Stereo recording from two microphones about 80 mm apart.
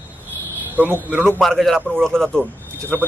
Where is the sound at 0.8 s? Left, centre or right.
Right.